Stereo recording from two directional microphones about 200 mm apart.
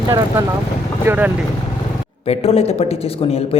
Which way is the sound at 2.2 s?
30° left (ahead or behind).